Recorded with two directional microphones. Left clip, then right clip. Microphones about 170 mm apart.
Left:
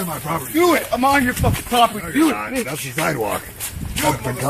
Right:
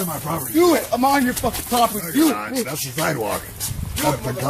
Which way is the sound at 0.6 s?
10° right (ahead or behind).